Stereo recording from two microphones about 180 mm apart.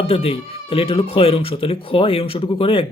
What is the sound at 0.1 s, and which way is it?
Speech, 30° left (ahead or behind).